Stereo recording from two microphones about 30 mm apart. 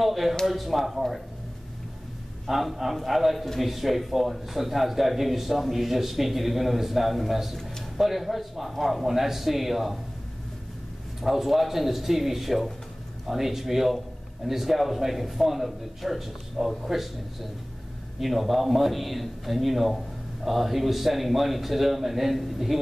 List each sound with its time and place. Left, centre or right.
0.0 s a man's voice: centre
2.4 s a man's voice: centre
11.1 s a man's voice: centre